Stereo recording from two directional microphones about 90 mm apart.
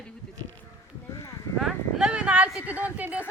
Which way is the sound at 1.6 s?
10° right (ahead or behind).